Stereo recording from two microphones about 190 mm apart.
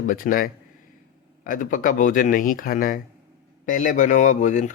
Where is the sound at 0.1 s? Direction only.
45° left (ahead or behind).